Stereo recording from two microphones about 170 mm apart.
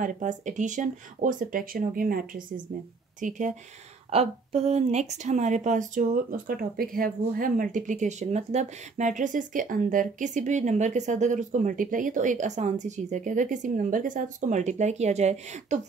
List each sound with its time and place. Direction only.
0.0 s speech: 45° right (ahead or behind)
4.1 s speech: 40° right (ahead or behind)